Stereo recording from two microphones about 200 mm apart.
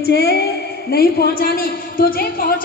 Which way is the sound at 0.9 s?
50° left (ahead or behind).